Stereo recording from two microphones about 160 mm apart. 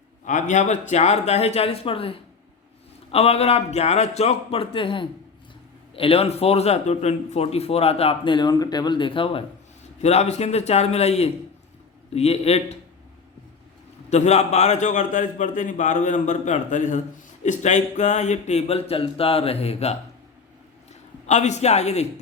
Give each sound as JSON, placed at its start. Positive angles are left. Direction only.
{"t": 0.3, "sound": "a man's voice", "side_deg": 50}
{"t": 10.0, "sound": "a man's voice", "side_deg": 45}
{"t": 14.1, "sound": "a man's voice", "side_deg": 45}
{"t": 21.2, "sound": "a man's voice", "side_deg": 45}